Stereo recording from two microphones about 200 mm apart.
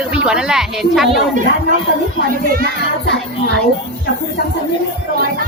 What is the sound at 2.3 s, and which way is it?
Speech, 45° right (ahead or behind).